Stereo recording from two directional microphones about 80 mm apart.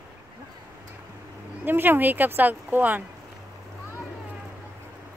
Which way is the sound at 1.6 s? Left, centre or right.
Right.